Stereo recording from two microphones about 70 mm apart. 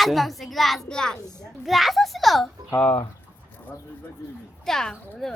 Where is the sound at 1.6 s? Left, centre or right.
Centre.